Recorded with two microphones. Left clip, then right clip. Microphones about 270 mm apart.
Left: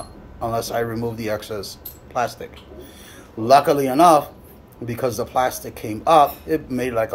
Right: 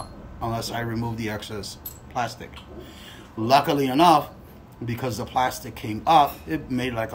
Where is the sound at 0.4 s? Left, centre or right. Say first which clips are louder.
Left 6 dB; centre.